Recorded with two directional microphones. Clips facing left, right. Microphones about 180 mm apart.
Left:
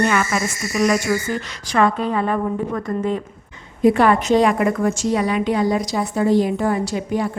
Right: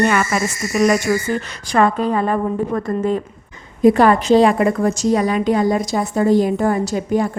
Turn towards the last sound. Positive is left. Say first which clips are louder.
# right 3 dB
turn(degrees=-45)  # may be behind; listen again after turning